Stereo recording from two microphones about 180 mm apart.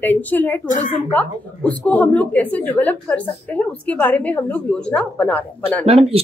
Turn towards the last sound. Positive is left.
turn(degrees=-35)  # may be behind; listen again after turning